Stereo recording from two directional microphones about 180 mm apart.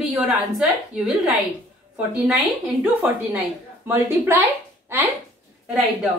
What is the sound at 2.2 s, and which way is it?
A woman's voice, centre (ahead or behind).